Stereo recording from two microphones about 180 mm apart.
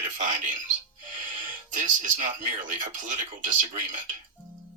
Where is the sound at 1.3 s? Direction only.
45° right (ahead or behind).